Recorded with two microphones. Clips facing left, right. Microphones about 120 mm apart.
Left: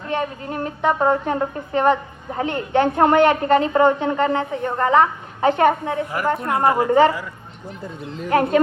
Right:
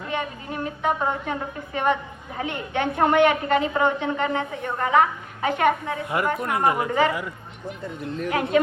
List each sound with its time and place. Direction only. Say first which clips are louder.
0.1 s a woman's voice: left 6 dB; 40° left (ahead or behind)
8.3 s a man's voice: left 8 dB; 45° left (ahead or behind)